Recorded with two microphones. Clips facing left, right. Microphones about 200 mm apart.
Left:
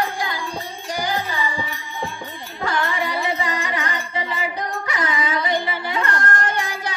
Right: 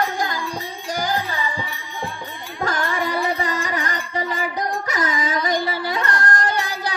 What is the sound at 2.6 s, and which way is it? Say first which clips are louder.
Music: even; 45° right (ahead or behind).